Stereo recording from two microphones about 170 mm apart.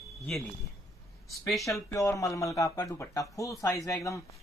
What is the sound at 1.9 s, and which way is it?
Speech, 20° left (ahead or behind).